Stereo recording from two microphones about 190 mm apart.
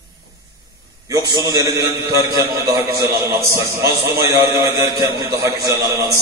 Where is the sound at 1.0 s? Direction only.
20° right (ahead or behind).